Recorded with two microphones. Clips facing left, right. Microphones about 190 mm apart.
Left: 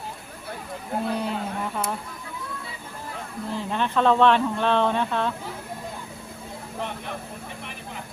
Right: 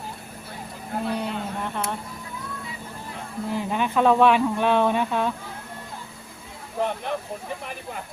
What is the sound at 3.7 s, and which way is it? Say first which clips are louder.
Speech: right 1 dB; 10° right (ahead or behind).